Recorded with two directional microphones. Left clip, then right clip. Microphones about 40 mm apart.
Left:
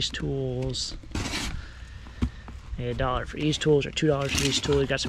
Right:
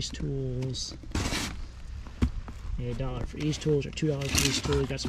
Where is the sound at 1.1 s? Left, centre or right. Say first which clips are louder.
Right 1 dB; centre.